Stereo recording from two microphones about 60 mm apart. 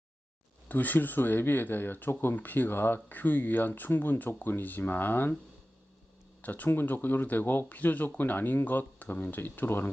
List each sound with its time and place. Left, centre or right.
0.7 s speech: left
6.4 s speech: left